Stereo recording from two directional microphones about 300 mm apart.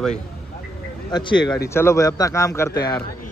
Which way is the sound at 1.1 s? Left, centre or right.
Centre.